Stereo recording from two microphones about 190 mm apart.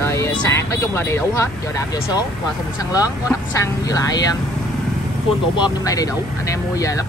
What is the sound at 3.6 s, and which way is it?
Speech, 20° left (ahead or behind).